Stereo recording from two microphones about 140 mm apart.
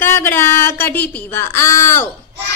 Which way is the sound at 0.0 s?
15° left (ahead or behind).